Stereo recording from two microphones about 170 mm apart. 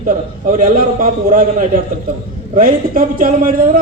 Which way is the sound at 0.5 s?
55° right (ahead or behind).